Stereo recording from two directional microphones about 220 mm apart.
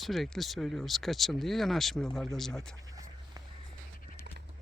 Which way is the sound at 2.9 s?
15° right (ahead or behind).